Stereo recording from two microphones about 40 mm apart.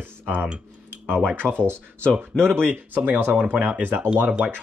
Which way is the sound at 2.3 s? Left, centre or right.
Centre.